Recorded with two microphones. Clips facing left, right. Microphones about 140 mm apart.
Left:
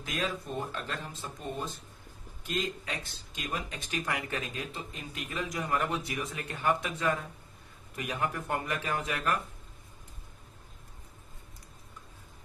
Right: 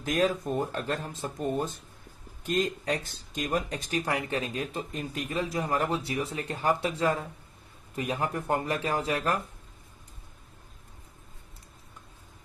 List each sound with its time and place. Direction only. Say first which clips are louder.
0.0 s speech: right 8 dB; 40° right (ahead or behind)